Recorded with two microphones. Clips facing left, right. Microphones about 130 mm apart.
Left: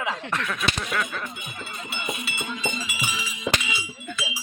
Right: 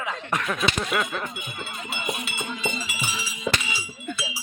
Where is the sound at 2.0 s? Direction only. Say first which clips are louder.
Right 1 dB; 25° right (ahead or behind).